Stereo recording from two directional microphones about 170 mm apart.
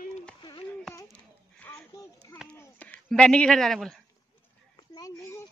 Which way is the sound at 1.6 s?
15° left (ahead or behind).